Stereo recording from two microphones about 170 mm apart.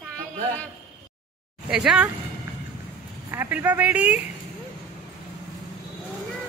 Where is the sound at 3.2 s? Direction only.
10° right (ahead or behind).